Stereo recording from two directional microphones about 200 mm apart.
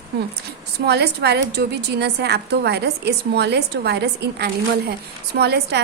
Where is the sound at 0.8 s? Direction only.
55° right (ahead or behind).